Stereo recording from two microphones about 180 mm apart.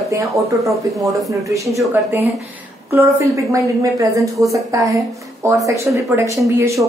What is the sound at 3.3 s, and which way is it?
Speech, 20° right (ahead or behind).